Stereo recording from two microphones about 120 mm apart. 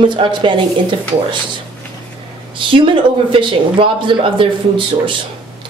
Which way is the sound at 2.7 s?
45° right (ahead or behind).